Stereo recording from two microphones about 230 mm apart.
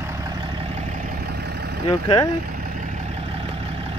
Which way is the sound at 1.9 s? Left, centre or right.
Centre.